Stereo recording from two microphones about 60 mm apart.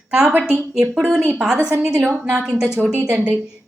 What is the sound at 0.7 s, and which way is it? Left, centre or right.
Speech, centre.